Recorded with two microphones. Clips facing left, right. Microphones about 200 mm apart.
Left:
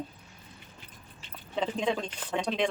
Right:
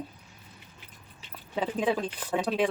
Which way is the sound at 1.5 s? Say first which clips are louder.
Right 2 dB; 10° right (ahead or behind).